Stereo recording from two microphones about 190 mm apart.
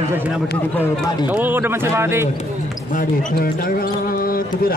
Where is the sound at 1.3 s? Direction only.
10° right (ahead or behind).